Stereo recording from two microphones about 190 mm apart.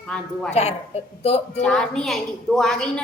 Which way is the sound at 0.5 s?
35° left (ahead or behind).